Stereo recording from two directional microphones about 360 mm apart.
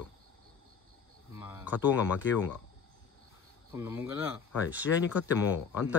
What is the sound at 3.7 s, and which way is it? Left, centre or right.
Speech, centre.